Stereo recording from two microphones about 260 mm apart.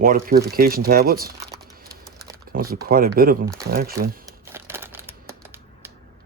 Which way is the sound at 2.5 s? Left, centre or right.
Right.